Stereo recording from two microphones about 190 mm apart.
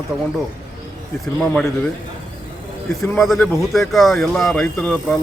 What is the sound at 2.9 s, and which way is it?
Speech, centre (ahead or behind).